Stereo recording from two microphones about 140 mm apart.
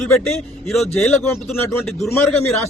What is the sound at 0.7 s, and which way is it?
Speech, centre (ahead or behind).